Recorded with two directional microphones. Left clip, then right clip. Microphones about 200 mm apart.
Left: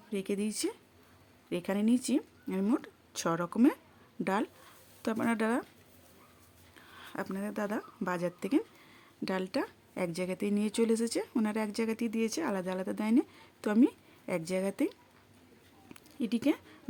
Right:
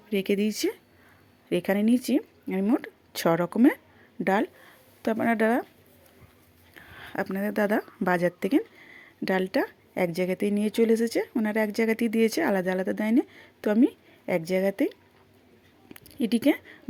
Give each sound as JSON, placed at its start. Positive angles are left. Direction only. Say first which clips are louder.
{"t": 0.1, "sound": "speech", "louder": "right 9 dB", "side_deg": -15}
{"t": 2.8, "sound": "a woman's voice", "louder": "right 9 dB", "side_deg": -20}
{"t": 6.7, "sound": "speech", "louder": "right 8 dB", "side_deg": -15}
{"t": 16.1, "sound": "speech", "louder": "right 7 dB", "side_deg": -20}